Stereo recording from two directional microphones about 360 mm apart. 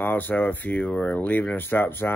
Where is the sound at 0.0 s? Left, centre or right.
Centre.